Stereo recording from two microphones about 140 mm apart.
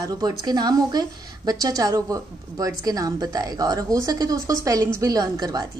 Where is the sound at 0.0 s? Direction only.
25° right (ahead or behind).